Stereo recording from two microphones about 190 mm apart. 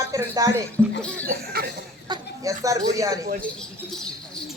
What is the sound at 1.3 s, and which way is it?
Cough, 55° right (ahead or behind).